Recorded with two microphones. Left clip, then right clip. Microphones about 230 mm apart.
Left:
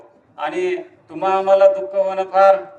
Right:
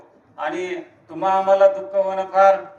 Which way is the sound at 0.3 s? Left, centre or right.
Left.